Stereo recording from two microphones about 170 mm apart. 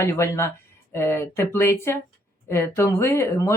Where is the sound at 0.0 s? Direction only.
15° left (ahead or behind).